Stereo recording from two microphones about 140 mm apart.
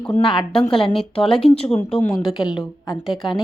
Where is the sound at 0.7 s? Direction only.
35° left (ahead or behind).